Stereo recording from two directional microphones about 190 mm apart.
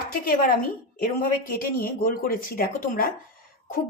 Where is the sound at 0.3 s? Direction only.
50° left (ahead or behind).